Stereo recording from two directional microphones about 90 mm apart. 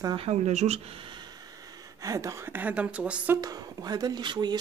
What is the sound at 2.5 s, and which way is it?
Speech, 20° right (ahead or behind).